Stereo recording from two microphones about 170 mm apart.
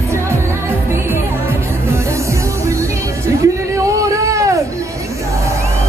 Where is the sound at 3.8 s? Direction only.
20° right (ahead or behind).